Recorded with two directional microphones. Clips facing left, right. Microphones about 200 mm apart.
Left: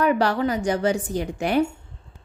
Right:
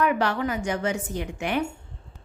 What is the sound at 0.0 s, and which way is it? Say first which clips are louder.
Speech: left 3 dB; 35° left (ahead or behind).